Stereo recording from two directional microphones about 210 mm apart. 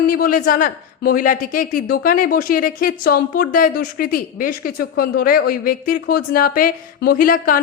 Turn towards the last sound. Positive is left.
turn(degrees=40)  # may be behind; listen again after turning